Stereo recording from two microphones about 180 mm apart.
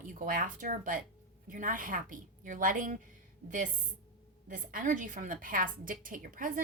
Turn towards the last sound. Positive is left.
turn(degrees=-50)  # may be behind; listen again after turning